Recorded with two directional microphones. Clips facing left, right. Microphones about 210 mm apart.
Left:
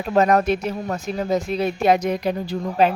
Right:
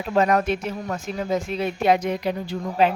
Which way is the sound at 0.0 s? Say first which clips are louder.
Left 3 dB; 45° left (ahead or behind).